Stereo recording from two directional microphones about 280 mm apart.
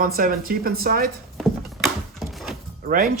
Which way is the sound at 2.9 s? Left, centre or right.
Right.